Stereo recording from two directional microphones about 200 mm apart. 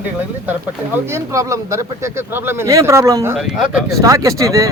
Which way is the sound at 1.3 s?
15° right (ahead or behind).